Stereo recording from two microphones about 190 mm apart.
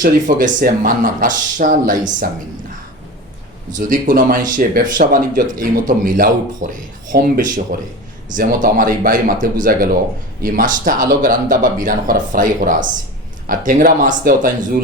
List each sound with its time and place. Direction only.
0.0 s speech: 45° right (ahead or behind)
3.8 s speech: 45° right (ahead or behind)